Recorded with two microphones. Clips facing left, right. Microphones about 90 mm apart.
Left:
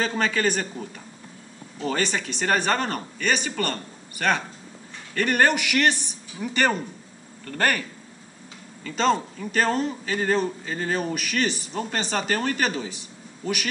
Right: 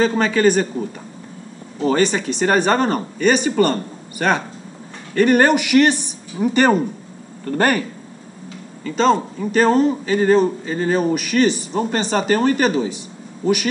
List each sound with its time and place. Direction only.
0.0 s speech: 5° right (ahead or behind)
7.4 s speech: 15° right (ahead or behind)
8.8 s speech: 5° right (ahead or behind)